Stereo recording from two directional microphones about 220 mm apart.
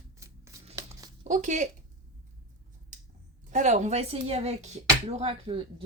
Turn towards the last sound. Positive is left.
turn(degrees=-25)  # may be behind; listen again after turning